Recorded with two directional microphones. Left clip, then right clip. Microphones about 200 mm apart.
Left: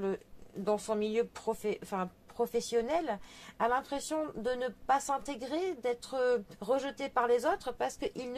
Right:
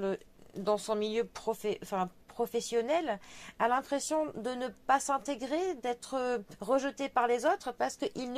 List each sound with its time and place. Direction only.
0.7 s speech: 35° right (ahead or behind)